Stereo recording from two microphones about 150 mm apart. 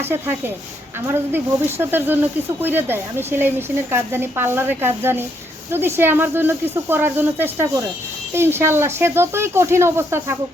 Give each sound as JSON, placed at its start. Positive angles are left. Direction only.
{"t": 0.0, "sound": "speech", "side_deg": -15}